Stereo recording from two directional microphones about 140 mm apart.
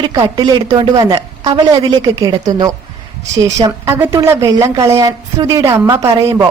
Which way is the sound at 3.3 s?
25° right (ahead or behind).